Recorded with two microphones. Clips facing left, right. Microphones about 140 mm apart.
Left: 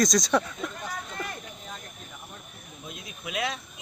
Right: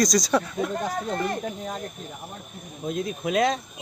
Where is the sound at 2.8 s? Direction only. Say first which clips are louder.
Right 14 dB; 45° right (ahead or behind).